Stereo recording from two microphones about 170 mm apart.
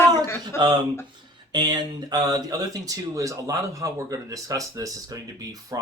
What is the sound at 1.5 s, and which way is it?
Speech, 25° right (ahead or behind).